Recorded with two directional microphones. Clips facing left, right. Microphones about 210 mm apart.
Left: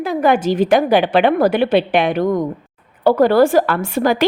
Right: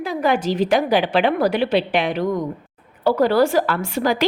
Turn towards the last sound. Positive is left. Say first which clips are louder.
# left 4 dB
turn(degrees=55)  # may be behind; listen again after turning